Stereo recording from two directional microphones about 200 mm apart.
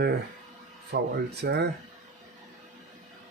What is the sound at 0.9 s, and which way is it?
Speech, 55° right (ahead or behind).